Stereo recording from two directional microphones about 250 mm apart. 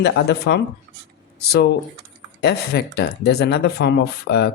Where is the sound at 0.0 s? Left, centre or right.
Left.